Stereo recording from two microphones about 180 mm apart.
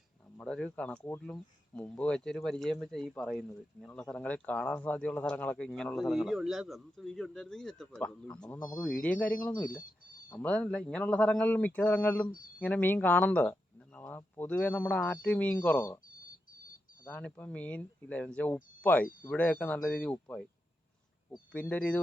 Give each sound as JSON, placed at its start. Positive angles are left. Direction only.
{"t": 0.3, "sound": "speech", "side_deg": 5}
{"t": 8.5, "sound": "speech", "side_deg": 20}
{"t": 8.8, "sound": "speech", "side_deg": 5}
{"t": 16.3, "sound": "a sound", "side_deg": 50}
{"t": 17.0, "sound": "speech", "side_deg": 10}
{"t": 21.5, "sound": "speech", "side_deg": 10}